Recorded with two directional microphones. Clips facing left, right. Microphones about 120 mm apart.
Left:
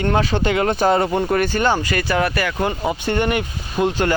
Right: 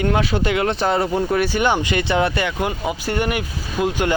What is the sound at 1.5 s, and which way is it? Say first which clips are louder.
Speech: even; 15° right (ahead or behind).